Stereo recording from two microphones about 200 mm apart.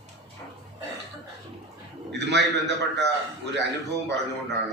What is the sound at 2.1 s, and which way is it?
Speech, 60° right (ahead or behind).